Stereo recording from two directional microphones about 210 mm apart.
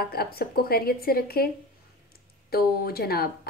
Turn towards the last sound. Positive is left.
turn(degrees=45)  # may be behind; listen again after turning